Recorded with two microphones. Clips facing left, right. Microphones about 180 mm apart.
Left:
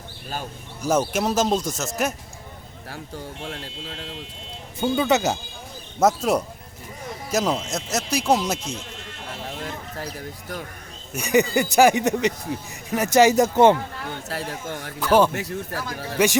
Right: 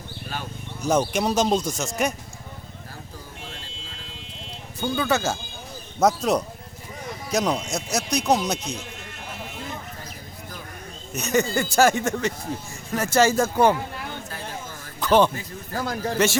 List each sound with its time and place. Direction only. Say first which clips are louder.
0.8 s speech: even; 5° left (ahead or behind)
2.9 s speech: left 9 dB; 70° left (ahead or behind)
4.8 s speech: left 3 dB; 20° left (ahead or behind)
6.0 s speech: left 1 dB; 5° left (ahead or behind)
11.1 s speech: left 3 dB; 10° left (ahead or behind)
14.3 s speech: left 5 dB; 75° left (ahead or behind)
15.0 s speech: left 1 dB; 10° left (ahead or behind)
15.3 s speech: left 5 dB; 75° left (ahead or behind)
16.1 s speech: left 3 dB; 15° left (ahead or behind)